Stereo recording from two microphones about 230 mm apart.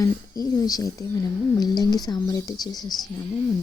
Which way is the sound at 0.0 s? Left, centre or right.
Centre.